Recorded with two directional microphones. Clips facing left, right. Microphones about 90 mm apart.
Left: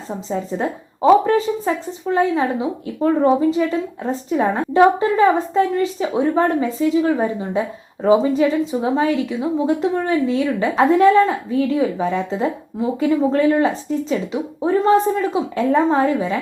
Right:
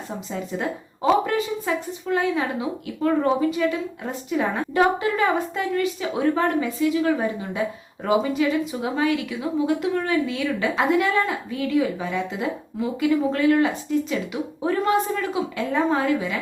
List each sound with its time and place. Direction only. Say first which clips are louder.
0.3 s a woman's voice: left 6 dB; 30° left (ahead or behind)